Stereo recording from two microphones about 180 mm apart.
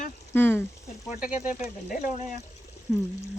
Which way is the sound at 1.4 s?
40° left (ahead or behind).